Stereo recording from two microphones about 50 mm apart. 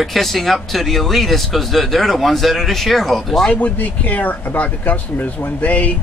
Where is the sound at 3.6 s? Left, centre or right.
Left.